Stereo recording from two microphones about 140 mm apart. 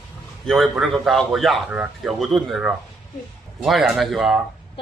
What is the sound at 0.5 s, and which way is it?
A man's voice, centre (ahead or behind).